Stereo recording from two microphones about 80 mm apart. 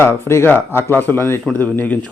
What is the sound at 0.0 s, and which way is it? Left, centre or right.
Speech, left.